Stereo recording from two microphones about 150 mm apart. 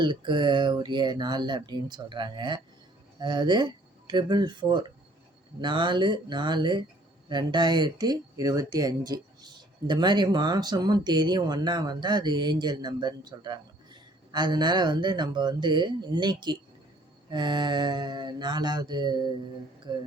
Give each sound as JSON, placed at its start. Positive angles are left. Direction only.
{"t": 0.0, "sound": "speech", "side_deg": -30}